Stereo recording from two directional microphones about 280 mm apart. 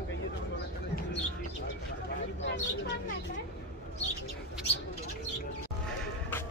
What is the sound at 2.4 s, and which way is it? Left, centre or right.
Speech, left.